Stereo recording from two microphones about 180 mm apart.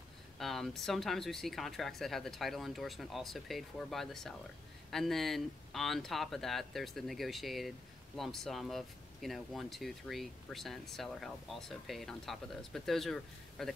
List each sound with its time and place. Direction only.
0.4 s speech: centre (ahead or behind)